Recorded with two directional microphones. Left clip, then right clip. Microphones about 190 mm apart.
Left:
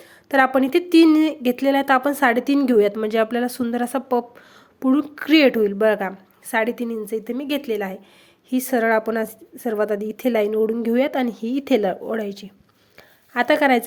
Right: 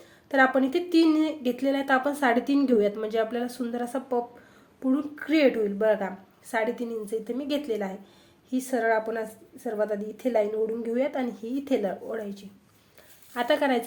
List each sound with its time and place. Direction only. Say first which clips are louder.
0.3 s a woman's voice: left 5 dB; 45° left (ahead or behind)